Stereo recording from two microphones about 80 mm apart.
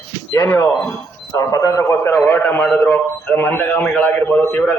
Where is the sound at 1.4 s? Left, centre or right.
Left.